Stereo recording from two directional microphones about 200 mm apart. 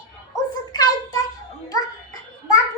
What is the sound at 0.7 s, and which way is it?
Child singing, 20° left (ahead or behind).